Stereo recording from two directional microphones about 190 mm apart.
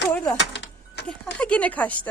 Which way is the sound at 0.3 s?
65° left (ahead or behind).